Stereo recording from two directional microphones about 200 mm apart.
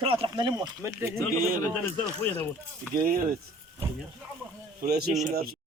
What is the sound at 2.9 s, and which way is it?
Speech, 45° right (ahead or behind).